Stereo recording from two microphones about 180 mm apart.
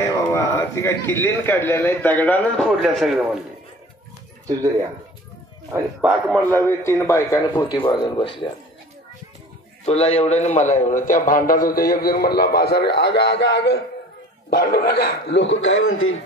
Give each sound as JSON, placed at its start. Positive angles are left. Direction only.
{"t": 0.0, "sound": "a man's voice", "side_deg": 15}
{"t": 2.7, "sound": "speech", "side_deg": 0}
{"t": 5.7, "sound": "speech", "side_deg": -5}
{"t": 6.4, "sound": "a man's voice", "side_deg": 10}
{"t": 9.8, "sound": "a man's voice", "side_deg": 35}